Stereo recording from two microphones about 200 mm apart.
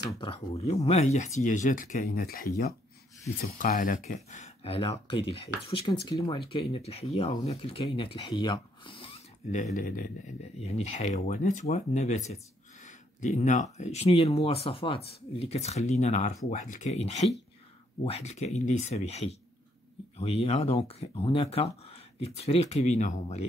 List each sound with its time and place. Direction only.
0.2 s speech: 30° left (ahead or behind)
9.8 s speech: 45° left (ahead or behind)